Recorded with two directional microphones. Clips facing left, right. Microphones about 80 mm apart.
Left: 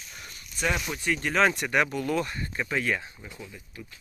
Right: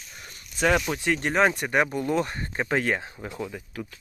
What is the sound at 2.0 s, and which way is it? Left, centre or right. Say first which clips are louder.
Speech: right 3 dB; right.